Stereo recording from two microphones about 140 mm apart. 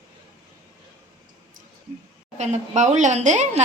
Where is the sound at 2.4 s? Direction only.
55° right (ahead or behind).